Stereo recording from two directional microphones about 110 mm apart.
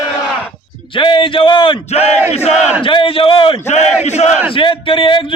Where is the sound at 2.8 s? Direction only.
55° left (ahead or behind).